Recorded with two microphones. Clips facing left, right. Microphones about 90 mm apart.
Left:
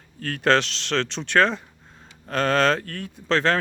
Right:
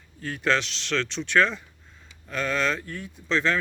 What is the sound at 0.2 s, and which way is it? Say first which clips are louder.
Speech: left 5 dB; 75° left (ahead or behind).